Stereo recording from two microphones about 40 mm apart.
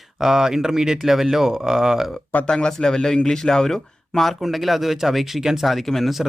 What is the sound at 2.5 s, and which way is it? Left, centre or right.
Speech, centre.